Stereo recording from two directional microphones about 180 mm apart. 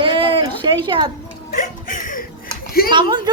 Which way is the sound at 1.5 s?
50° left (ahead or behind).